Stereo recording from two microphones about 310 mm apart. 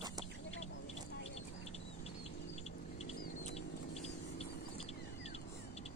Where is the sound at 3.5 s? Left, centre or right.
Centre.